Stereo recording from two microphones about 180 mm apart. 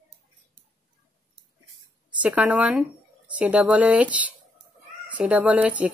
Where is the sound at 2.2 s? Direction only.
10° right (ahead or behind).